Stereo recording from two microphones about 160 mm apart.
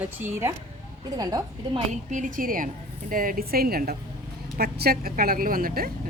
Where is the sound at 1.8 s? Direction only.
55° right (ahead or behind).